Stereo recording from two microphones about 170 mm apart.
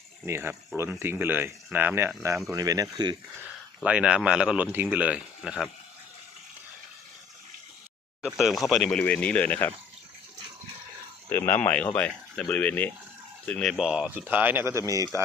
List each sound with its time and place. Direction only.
0.3 s speech: 15° right (ahead or behind)
3.8 s speech: 5° right (ahead or behind)
8.2 s speech: centre (ahead or behind)
11.3 s speech: 10° left (ahead or behind); by 15.2 s 20° right (ahead or behind)